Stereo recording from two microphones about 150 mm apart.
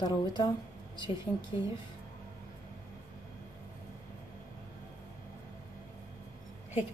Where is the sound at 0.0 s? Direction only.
30° left (ahead or behind).